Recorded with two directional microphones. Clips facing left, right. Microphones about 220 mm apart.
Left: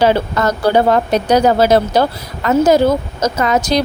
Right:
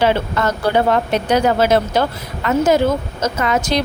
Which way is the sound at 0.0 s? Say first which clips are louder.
Left 3 dB; 40° left (ahead or behind).